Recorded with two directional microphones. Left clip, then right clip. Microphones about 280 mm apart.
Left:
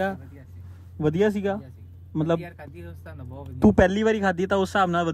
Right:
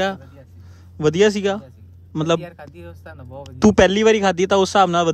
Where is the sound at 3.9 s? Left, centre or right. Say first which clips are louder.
Right 7 dB; right.